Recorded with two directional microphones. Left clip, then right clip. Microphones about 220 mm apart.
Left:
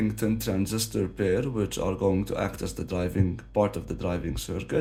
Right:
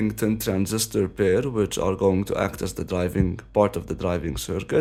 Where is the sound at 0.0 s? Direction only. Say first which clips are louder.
Right 4 dB; 45° right (ahead or behind).